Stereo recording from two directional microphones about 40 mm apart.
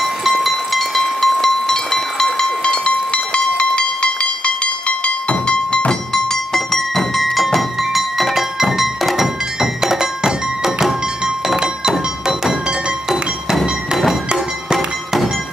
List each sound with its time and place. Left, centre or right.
0.0 s music: centre; by 5.8 s left
5.9 s music: centre
11.4 s thunk: centre